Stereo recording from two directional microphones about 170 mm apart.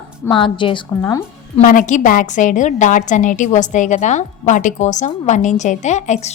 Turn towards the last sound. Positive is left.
turn(degrees=45)  # may be behind; listen again after turning